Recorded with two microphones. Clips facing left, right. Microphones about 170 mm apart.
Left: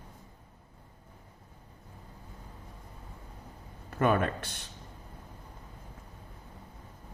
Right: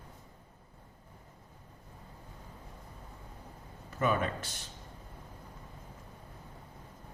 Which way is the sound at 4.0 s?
60° left (ahead or behind).